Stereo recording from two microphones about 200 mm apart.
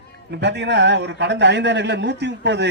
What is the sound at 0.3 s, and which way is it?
A man's voice, 60° right (ahead or behind).